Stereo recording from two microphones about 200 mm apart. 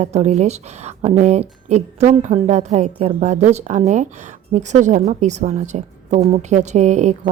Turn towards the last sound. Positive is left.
turn(degrees=-35)  # may be behind; listen again after turning